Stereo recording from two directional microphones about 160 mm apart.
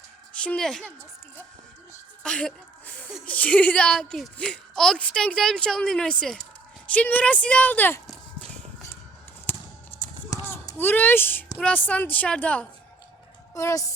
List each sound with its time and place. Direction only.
0.4 s a child's voice: 5° left (ahead or behind)
2.2 s a child's voice: 5° left (ahead or behind)
10.2 s a sound: 20° left (ahead or behind)
11.5 s a woman's voice: 10° left (ahead or behind)